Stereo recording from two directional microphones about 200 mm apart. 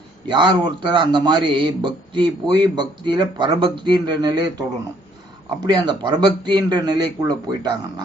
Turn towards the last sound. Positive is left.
turn(degrees=-20)  # may be behind; listen again after turning